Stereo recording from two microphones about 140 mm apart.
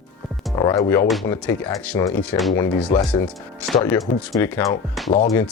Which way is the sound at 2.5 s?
20° left (ahead or behind).